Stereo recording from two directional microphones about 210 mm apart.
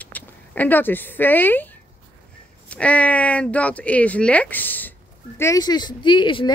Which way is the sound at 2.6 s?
5° left (ahead or behind).